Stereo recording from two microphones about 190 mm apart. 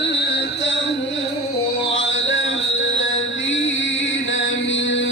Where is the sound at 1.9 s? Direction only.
85° left.